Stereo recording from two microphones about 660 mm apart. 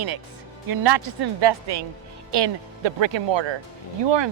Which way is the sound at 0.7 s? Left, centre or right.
Right.